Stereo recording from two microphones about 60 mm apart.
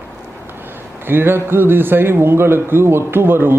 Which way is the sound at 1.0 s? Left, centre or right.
Right.